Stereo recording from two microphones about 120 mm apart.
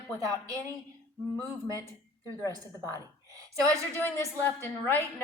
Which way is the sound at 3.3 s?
30° right (ahead or behind).